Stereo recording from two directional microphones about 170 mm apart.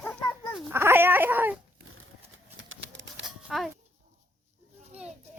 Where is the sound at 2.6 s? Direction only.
90° right.